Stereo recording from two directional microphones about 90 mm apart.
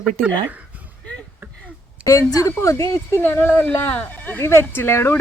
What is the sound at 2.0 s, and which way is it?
A woman's voice, 35° left (ahead or behind).